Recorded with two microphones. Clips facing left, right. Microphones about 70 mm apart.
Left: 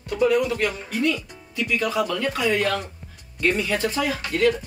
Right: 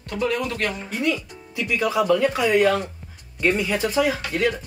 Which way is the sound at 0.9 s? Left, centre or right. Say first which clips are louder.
Left 1 dB; centre.